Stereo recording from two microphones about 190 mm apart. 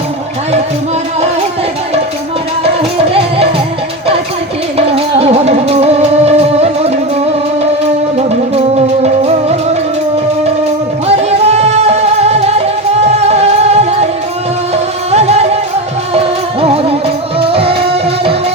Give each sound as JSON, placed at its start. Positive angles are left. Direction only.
{"t": 5.1, "sound": "music", "side_deg": -30}
{"t": 8.5, "sound": "music", "side_deg": -35}
{"t": 11.2, "sound": "music", "side_deg": -35}
{"t": 15.1, "sound": "music", "side_deg": -35}